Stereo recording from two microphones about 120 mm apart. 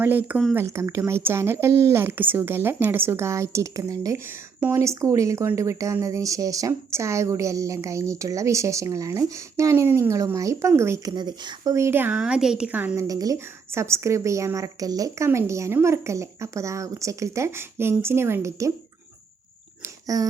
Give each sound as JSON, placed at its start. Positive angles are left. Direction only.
{"t": 0.0, "sound": "a woman's voice", "side_deg": -15}
{"t": 12.1, "sound": "a woman's voice", "side_deg": -5}
{"t": 13.1, "sound": "speech", "side_deg": -30}
{"t": 19.8, "sound": "a sound", "side_deg": -30}